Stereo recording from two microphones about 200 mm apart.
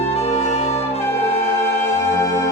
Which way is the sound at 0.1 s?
30° left (ahead or behind).